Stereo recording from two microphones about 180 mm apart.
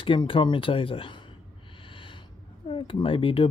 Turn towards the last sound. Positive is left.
turn(degrees=30)  # may be behind; listen again after turning